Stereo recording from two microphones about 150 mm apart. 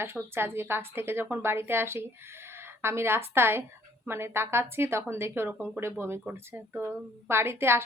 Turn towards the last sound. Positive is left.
turn(degrees=-15)  # may be behind; listen again after turning